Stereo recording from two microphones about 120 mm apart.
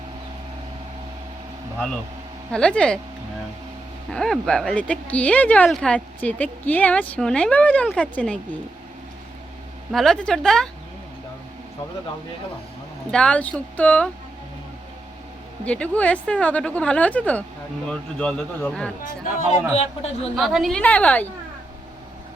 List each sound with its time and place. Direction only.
2.5 s speech: 10° left (ahead or behind)
4.1 s speech: 5° left (ahead or behind)
9.9 s a woman's voice: 5° left (ahead or behind)
13.1 s speech: 10° left (ahead or behind)
15.6 s speech: 10° left (ahead or behind)
19.7 s a man's voice: 55° left (ahead or behind)
20.3 s a woman's voice: centre (ahead or behind)
20.8 s speech: 10° left (ahead or behind)